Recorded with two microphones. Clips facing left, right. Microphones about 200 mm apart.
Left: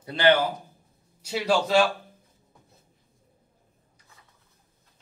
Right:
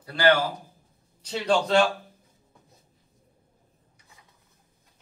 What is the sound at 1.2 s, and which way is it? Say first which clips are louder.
Speech: even; 5° left (ahead or behind).